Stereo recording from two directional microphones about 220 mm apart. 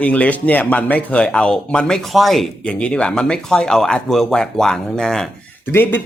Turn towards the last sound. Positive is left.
turn(degrees=10)  # may be behind; listen again after turning